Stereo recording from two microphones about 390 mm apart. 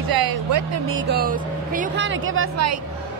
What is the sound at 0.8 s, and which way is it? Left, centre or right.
Speech, right.